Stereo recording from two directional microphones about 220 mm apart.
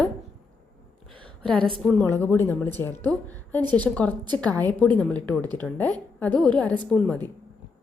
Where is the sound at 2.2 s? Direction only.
10° left (ahead or behind).